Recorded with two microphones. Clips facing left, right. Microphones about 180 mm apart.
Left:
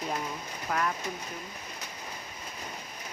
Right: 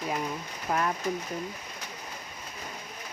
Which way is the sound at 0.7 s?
25° right (ahead or behind).